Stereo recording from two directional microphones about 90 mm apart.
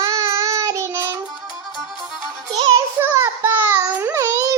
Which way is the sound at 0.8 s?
30° right (ahead or behind).